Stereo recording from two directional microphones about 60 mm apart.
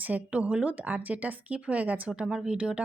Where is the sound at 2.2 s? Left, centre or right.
Centre.